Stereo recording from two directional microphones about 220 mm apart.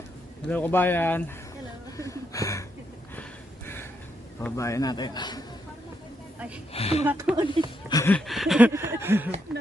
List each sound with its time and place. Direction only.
0.4 s a man's voice: 5° left (ahead or behind)
4.4 s a man's voice: 15° left (ahead or behind)
6.7 s speech: 25° left (ahead or behind)
7.0 s a sound: 10° right (ahead or behind)
7.9 s a man's voice: 15° left (ahead or behind)
8.1 s a sound: centre (ahead or behind)